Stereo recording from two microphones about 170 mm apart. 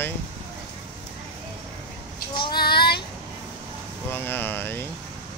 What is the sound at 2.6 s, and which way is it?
Child singing, 70° left (ahead or behind).